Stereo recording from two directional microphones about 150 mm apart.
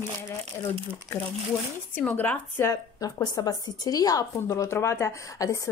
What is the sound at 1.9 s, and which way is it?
Speech, 10° left (ahead or behind).